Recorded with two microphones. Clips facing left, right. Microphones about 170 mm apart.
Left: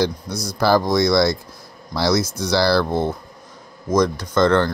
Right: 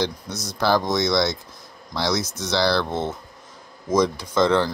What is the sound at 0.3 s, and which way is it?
Speech, 20° right (ahead or behind).